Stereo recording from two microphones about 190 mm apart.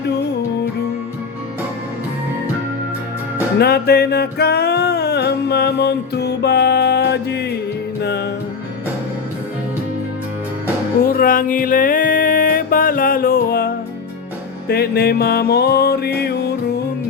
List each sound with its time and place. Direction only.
3.6 s music: 55° left (ahead or behind)
11.0 s music: 50° left (ahead or behind)
14.7 s music: 55° left (ahead or behind)